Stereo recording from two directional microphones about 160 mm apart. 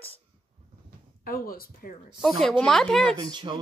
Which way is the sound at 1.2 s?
65° left (ahead or behind).